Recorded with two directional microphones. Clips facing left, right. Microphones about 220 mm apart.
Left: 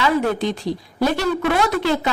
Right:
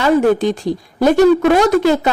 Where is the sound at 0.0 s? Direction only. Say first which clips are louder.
Right 7 dB; 45° right (ahead or behind).